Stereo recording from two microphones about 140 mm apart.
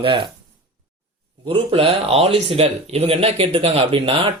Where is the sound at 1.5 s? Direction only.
40° right (ahead or behind).